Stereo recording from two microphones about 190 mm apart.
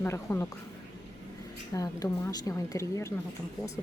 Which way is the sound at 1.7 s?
20° left (ahead or behind).